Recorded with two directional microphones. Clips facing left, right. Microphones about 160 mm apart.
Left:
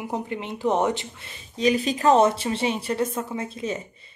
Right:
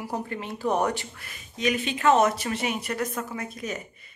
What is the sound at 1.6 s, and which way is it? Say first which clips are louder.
A woman's voice: left 4 dB; 35° left (ahead or behind).